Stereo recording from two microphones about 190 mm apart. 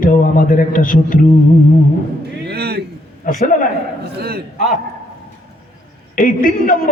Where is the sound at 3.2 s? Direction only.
45° left (ahead or behind).